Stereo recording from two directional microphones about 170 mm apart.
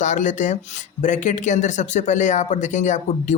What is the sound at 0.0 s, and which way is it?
Speech, 45° left (ahead or behind).